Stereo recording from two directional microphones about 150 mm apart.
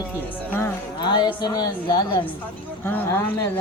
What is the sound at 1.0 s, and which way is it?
Speech, 30° left (ahead or behind).